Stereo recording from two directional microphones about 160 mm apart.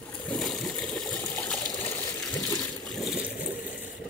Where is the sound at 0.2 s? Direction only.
5° left (ahead or behind).